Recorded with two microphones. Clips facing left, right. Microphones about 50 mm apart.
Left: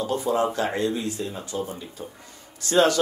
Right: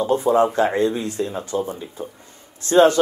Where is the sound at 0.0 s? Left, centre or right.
Right.